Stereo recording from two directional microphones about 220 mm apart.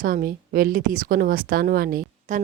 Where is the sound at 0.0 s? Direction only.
40° right (ahead or behind).